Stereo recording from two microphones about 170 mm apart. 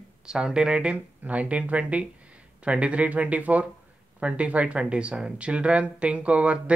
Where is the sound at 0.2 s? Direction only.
5° right (ahead or behind).